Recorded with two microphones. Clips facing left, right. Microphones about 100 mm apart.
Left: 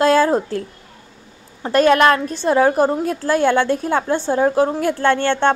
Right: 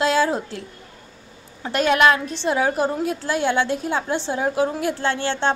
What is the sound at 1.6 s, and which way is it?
A woman's voice, 45° left (ahead or behind).